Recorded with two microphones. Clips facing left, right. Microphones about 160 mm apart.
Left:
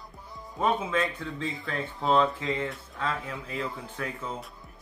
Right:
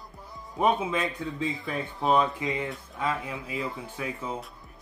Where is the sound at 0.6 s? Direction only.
15° right (ahead or behind).